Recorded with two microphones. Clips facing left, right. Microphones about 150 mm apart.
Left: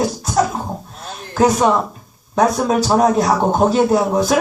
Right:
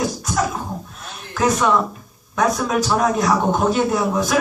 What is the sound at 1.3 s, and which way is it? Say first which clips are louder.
A man's voice: left 4 dB; 30° left (ahead or behind).